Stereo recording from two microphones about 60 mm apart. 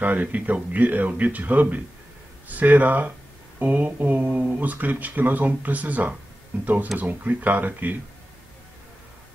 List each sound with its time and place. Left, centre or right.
0.0 s speech: right